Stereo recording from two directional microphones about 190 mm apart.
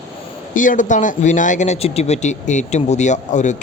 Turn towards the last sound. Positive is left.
turn(degrees=40)  # may be behind; listen again after turning